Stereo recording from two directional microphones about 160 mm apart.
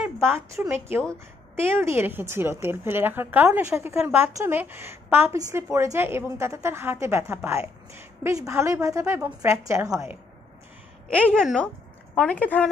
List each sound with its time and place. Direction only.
0.0 s a woman's voice: 15° right (ahead or behind)
11.1 s a woman's voice: 5° left (ahead or behind)